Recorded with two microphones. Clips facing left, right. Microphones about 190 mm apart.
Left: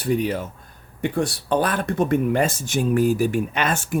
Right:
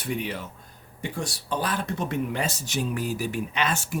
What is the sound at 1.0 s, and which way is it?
Speech, 60° left (ahead or behind).